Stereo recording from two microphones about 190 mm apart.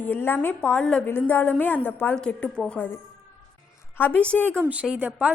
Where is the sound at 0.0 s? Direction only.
10° left (ahead or behind).